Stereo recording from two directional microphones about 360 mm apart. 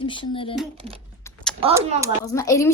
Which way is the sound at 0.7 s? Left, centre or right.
Centre.